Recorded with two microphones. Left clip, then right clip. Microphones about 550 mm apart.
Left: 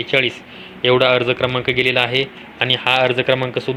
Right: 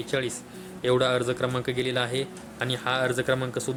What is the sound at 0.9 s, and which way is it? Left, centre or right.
Speech, right.